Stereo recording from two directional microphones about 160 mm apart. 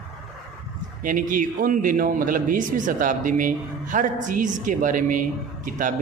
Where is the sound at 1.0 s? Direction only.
55° right (ahead or behind).